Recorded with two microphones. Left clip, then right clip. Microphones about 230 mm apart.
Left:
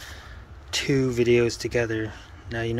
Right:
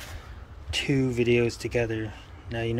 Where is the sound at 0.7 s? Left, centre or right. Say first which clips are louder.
Left 3 dB; centre.